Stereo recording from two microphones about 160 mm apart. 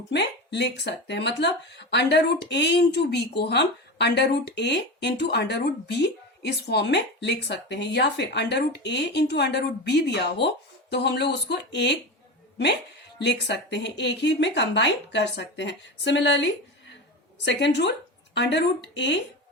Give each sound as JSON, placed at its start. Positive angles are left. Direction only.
{"t": 0.1, "sound": "speech", "side_deg": 90}
{"t": 13.1, "sound": "speech", "side_deg": 90}